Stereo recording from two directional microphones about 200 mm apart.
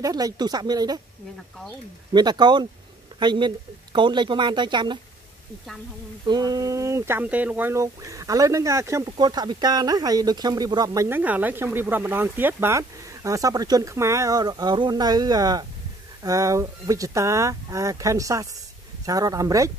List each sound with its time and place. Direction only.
0.0 s speech: 20° right (ahead or behind)
2.1 s speech: 20° right (ahead or behind)
6.2 s speech: 20° right (ahead or behind)